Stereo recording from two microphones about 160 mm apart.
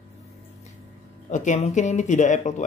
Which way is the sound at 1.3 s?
50° left (ahead or behind).